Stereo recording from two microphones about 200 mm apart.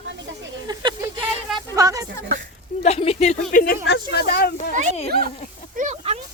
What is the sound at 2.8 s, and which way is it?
Speech, 30° left (ahead or behind).